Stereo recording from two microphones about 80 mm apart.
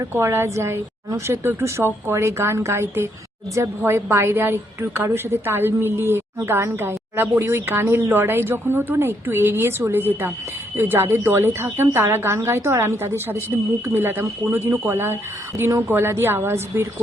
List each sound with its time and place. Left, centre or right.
0.0 s a woman's voice: right